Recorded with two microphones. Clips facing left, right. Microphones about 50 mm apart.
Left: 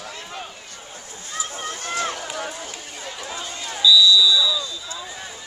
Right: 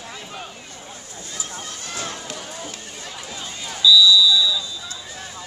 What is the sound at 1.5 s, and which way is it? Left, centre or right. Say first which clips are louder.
Run: left 6 dB; left.